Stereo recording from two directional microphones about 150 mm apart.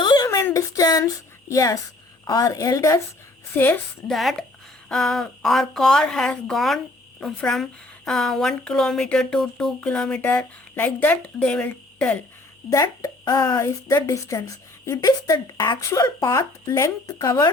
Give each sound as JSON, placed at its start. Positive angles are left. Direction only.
{"t": 0.0, "sound": "a sound", "side_deg": 30}
{"t": 2.2, "sound": "a child's voice", "side_deg": 25}
{"t": 4.1, "sound": "a woman's voice", "side_deg": 0}
{"t": 12.7, "sound": "a child's voice", "side_deg": 20}